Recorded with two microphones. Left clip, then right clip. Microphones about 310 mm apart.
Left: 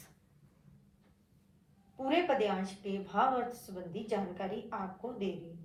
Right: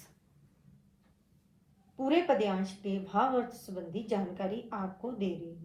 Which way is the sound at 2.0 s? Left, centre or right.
Right.